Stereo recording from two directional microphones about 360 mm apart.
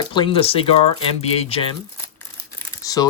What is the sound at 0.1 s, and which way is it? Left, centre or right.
Speech, centre.